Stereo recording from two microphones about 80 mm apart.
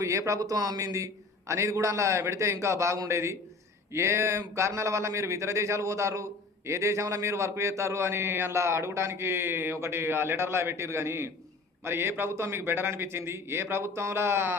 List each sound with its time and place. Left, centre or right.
0.0 s a man's voice: right